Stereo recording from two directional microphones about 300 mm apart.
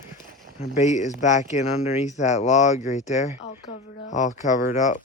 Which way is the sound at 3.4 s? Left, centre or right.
Left.